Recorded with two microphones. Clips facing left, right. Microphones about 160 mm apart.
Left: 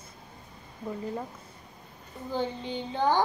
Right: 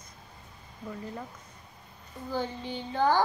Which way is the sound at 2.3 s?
20° left (ahead or behind).